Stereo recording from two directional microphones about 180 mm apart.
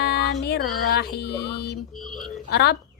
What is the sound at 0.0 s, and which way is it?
Female singing, 65° left (ahead or behind).